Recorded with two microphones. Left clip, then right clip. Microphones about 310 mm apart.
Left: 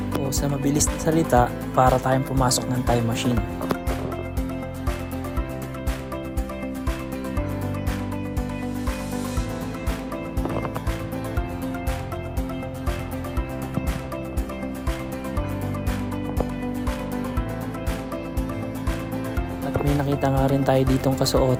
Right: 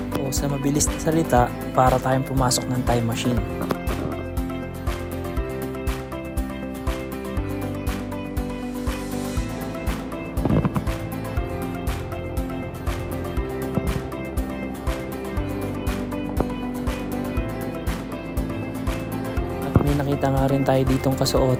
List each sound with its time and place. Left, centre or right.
0.1 s speech: centre
20.1 s music: centre